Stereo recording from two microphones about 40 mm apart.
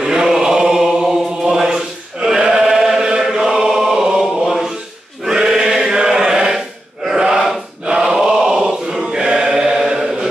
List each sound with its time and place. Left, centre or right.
0.0 s chant: centre
7.2 s a sound: centre
8.0 s choir: centre